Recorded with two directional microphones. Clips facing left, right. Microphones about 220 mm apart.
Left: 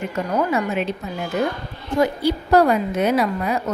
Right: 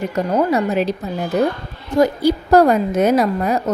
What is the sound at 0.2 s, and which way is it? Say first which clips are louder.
A woman's voice: right 4 dB; 40° right (ahead or behind).